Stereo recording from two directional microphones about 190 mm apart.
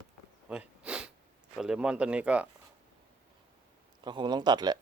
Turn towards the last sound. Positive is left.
turn(degrees=-20)  # may be behind; listen again after turning